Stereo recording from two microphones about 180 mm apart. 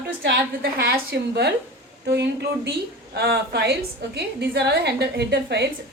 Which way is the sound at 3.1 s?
60° right (ahead or behind).